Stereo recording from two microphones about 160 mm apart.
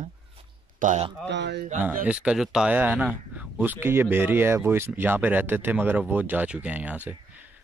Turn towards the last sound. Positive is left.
turn(degrees=-10)  # may be behind; listen again after turning